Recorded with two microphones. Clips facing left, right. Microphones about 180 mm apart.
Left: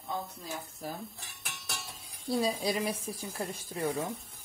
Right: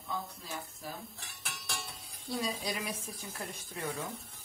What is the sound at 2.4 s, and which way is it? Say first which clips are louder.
A woman's voice: left 6 dB; 30° left (ahead or behind).